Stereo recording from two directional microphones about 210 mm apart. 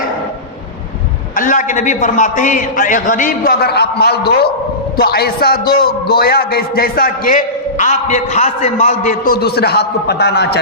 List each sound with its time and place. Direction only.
1.4 s a man's voice: 40° left (ahead or behind)